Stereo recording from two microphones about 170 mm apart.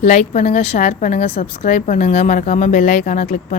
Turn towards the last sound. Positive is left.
turn(degrees=50)  # may be behind; listen again after turning